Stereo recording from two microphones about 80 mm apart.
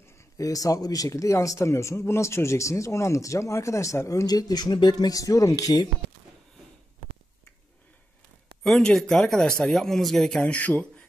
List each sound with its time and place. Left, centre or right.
0.4 s speech: left
8.6 s speech: centre